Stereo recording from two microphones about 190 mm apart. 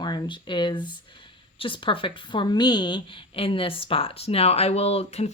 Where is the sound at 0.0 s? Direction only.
25° left (ahead or behind).